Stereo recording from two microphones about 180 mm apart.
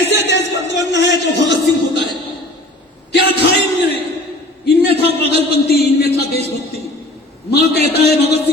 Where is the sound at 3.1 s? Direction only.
65° left (ahead or behind).